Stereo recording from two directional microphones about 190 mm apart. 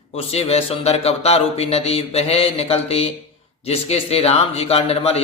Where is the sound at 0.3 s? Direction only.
35° left (ahead or behind).